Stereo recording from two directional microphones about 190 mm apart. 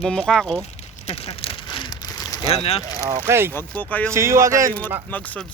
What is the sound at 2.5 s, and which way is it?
Speech, 30° left (ahead or behind).